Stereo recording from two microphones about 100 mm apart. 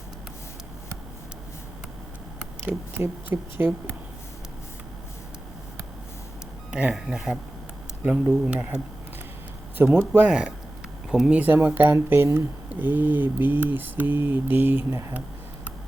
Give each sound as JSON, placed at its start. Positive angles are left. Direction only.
{"t": 3.0, "sound": "mantra", "side_deg": -20}
{"t": 6.7, "sound": "speech", "side_deg": -10}
{"t": 9.7, "sound": "mantra", "side_deg": -20}
{"t": 10.2, "sound": "speech", "side_deg": -10}
{"t": 11.1, "sound": "mantra", "side_deg": -10}